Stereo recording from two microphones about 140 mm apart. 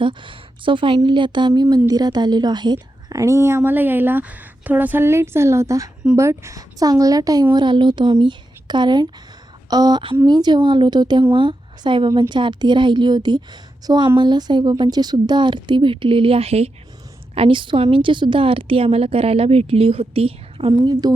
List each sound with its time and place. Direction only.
0.0 s a woman's voice: 35° right (ahead or behind)